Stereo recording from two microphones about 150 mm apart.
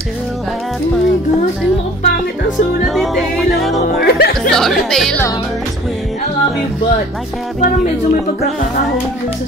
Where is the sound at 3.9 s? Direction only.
90° left.